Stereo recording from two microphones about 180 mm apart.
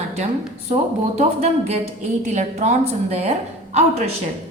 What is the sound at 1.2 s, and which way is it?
A woman's voice, 35° right (ahead or behind).